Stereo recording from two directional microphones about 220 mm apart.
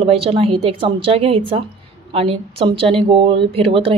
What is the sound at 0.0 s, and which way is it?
Speech, 25° right (ahead or behind).